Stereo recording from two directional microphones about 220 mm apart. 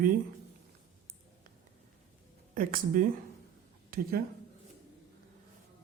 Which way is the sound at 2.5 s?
40° right (ahead or behind).